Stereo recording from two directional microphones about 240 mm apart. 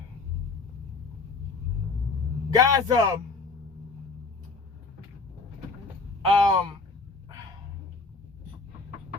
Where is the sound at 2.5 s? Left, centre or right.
Centre.